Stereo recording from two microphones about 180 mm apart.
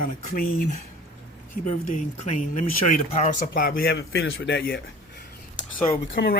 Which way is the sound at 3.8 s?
80° left.